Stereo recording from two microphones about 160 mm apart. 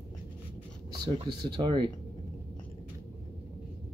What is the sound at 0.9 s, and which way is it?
Speech, 30° right (ahead or behind).